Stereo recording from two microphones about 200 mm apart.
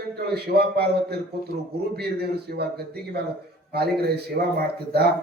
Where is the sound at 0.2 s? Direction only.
50° right (ahead or behind).